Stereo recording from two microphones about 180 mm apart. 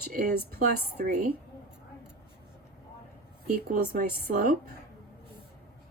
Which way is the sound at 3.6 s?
55° right (ahead or behind).